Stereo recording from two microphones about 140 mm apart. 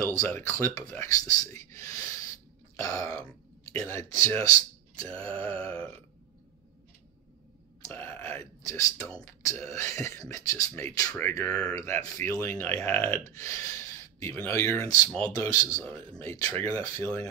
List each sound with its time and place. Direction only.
0.0 s speech: 20° left (ahead or behind)
5.2 s speech: 10° left (ahead or behind)
7.9 s speech: 15° left (ahead or behind)
15.8 s speech: 10° left (ahead or behind)